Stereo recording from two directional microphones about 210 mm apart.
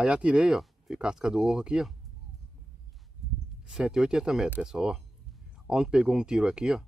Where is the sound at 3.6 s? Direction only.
5° right (ahead or behind).